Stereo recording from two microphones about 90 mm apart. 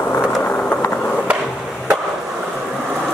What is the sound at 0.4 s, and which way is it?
Skateboard, 25° left (ahead or behind).